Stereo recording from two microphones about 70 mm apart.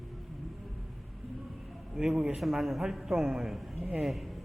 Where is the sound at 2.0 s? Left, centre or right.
Centre.